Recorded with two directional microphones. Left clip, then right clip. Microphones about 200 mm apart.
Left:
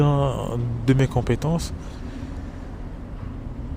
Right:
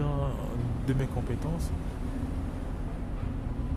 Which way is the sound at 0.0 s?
50° left (ahead or behind).